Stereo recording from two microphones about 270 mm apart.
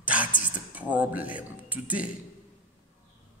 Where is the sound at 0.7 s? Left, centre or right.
Centre.